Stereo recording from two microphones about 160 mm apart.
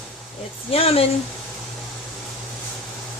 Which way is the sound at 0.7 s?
35° left (ahead or behind).